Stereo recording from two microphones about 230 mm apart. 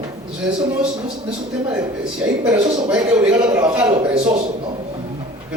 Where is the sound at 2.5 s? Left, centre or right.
Centre.